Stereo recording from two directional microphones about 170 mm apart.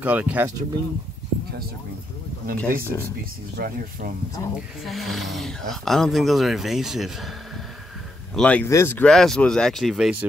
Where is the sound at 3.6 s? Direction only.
65° right (ahead or behind).